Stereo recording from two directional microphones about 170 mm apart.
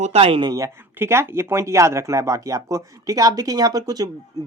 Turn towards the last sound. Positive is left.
turn(degrees=-20)  # may be behind; listen again after turning